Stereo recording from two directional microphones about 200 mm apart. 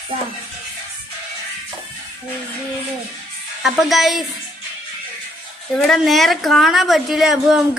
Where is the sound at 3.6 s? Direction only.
Centre (ahead or behind).